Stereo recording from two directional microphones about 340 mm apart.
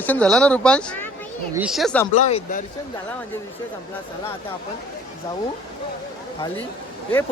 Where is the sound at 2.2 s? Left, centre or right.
Left.